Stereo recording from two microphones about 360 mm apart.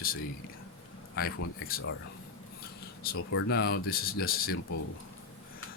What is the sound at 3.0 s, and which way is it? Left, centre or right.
Speech, left.